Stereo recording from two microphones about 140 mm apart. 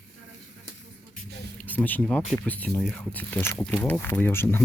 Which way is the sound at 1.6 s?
10° left (ahead or behind).